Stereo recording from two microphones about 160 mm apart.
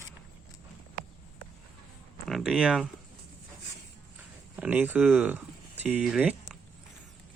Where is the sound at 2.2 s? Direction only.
Centre (ahead or behind).